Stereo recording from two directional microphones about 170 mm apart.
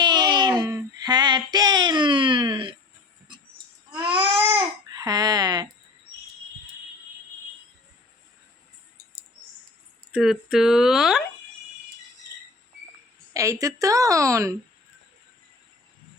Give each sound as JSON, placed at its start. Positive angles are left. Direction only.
{"t": 0.0, "sound": "child singing", "side_deg": -25}
{"t": 4.1, "sound": "baby cry", "side_deg": -10}
{"t": 4.9, "sound": "a sound", "side_deg": -20}
{"t": 10.1, "sound": "speech", "side_deg": 0}
{"t": 13.3, "sound": "a woman's voice", "side_deg": -20}